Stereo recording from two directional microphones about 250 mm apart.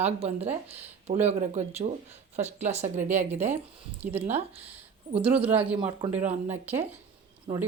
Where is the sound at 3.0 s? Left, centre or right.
Centre.